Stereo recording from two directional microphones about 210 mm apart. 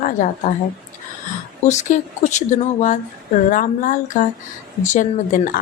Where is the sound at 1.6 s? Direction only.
35° left (ahead or behind).